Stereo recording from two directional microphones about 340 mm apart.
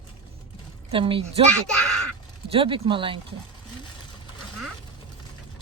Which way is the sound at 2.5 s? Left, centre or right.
Centre.